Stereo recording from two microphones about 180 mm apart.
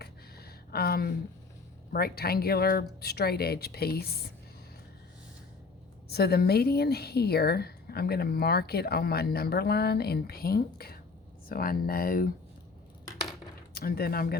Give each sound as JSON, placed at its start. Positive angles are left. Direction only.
{"t": 0.0, "sound": "a sound", "side_deg": 60}
{"t": 1.9, "sound": "a woman's voice", "side_deg": 55}
{"t": 6.1, "sound": "a woman's voice", "side_deg": 60}
{"t": 13.7, "sound": "a woman's voice", "side_deg": 55}